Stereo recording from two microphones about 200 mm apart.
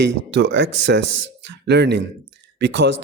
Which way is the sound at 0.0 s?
60° right (ahead or behind).